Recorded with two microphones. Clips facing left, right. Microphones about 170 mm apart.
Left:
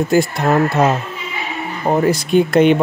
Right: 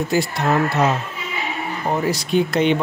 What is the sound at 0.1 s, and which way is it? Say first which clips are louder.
Speech: left 4 dB; 50° left (ahead or behind).